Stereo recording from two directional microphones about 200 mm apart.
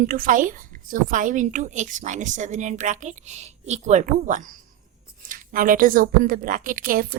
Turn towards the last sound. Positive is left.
turn(degrees=-45)  # may be behind; listen again after turning